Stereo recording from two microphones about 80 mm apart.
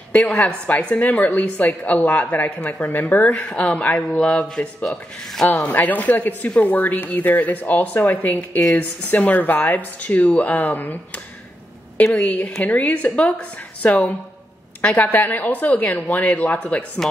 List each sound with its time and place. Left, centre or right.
0.1 s a woman's voice: centre
5.5 s speech: left
8.4 s a woman's voice: centre
9.0 s speech: left
12.0 s a woman's voice: centre